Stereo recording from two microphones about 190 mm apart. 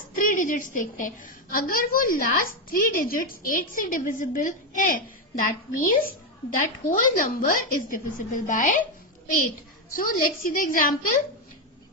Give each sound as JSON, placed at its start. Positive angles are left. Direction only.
{"t": 0.2, "sound": "a woman's voice", "side_deg": 45}
{"t": 9.9, "sound": "a woman's voice", "side_deg": 45}